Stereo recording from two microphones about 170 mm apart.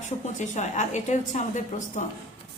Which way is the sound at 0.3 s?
45° left (ahead or behind).